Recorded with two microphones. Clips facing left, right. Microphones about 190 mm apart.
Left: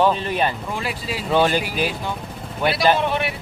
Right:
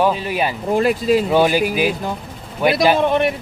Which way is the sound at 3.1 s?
40° right (ahead or behind).